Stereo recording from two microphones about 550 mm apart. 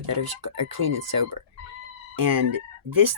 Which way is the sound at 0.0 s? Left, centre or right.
Right.